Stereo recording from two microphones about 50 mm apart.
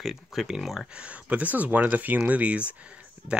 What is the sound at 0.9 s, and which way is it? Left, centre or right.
Speech, right.